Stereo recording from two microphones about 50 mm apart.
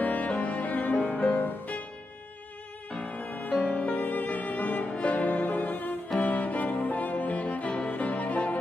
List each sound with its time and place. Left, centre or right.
0.0 s music: left
3.0 s music: left